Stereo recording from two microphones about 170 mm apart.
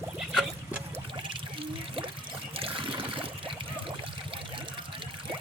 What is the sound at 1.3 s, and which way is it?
Water, 30° right (ahead or behind).